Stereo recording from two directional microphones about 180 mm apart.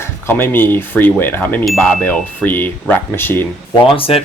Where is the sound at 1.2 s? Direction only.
10° left (ahead or behind).